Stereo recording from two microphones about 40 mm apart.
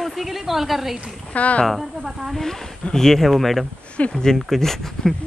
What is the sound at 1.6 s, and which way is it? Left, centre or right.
Speech, centre.